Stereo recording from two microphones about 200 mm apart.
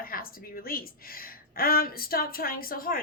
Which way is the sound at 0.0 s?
45° left (ahead or behind).